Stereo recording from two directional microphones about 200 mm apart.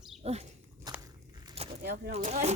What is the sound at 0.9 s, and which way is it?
Biting, 15° right (ahead or behind).